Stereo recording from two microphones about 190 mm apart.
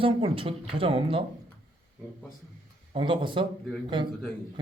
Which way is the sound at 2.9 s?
25° right (ahead or behind).